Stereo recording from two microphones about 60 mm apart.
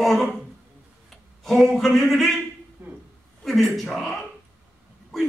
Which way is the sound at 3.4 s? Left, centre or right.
Centre.